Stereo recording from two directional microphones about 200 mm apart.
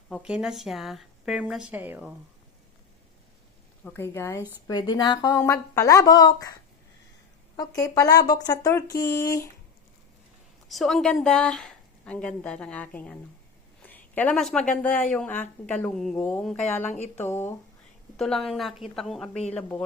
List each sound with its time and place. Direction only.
0.1 s a woman's voice: 5° right (ahead or behind)
3.8 s speech: 10° left (ahead or behind)
7.5 s speech: 20° left (ahead or behind)
10.7 s a woman's voice: centre (ahead or behind)
13.8 s a sound: 10° left (ahead or behind)
14.8 s a woman's voice: 5° left (ahead or behind)